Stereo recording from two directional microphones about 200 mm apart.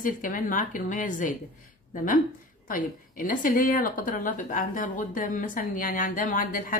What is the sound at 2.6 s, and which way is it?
A woman's voice, 45° left (ahead or behind).